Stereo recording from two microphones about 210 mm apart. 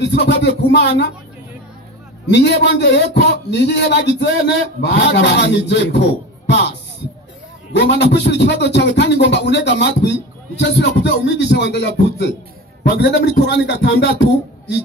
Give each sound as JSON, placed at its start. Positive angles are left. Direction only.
{"t": 0.0, "sound": "a man's voice", "side_deg": 55}
{"t": 2.2, "sound": "a man's voice", "side_deg": 55}